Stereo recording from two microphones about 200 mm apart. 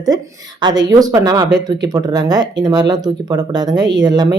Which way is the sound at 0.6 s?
20° right (ahead or behind).